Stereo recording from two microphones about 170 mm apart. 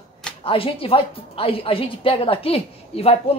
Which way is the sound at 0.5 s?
35° left (ahead or behind).